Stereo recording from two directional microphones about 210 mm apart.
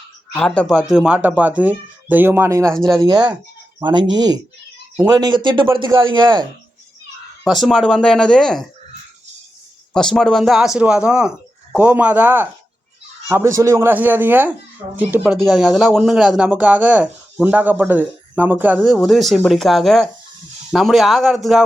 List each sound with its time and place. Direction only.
0.3 s speech: 5° left (ahead or behind); by 6.4 s 20° right (ahead or behind)
7.4 s speech: centre (ahead or behind)
9.9 s speech: 5° left (ahead or behind)